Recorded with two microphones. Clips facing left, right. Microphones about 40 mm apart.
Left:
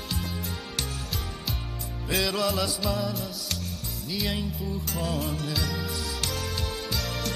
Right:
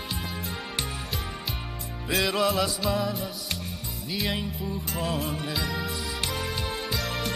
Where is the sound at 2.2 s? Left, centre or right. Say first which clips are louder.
Right 4 dB; centre.